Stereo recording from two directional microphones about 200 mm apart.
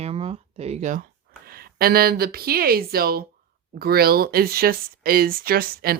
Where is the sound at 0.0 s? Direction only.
30° right (ahead or behind).